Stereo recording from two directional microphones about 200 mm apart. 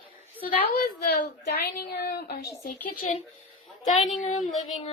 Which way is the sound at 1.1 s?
50° left (ahead or behind).